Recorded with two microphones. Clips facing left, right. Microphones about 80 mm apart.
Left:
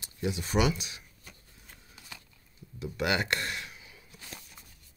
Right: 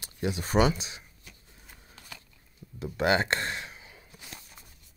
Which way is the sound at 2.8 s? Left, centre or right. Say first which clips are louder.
Right 4 dB; right.